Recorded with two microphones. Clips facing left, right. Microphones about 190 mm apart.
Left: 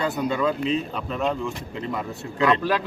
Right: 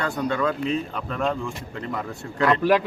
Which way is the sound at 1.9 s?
5° left (ahead or behind).